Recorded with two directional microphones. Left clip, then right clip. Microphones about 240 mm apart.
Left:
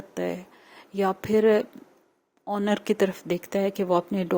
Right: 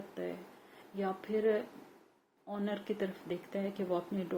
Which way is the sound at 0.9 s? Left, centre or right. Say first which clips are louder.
Left 12 dB; left.